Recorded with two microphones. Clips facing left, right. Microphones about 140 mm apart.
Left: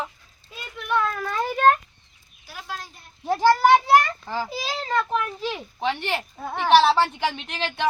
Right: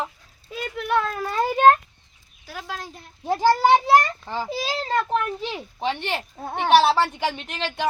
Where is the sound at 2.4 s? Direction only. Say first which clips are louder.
Right 2 dB; 90° right.